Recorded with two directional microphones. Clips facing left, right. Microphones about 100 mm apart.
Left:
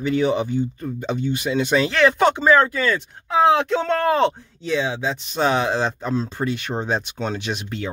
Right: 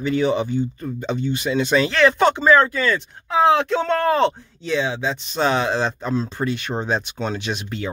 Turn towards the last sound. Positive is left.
turn(degrees=0)  # may be behind; listen again after turning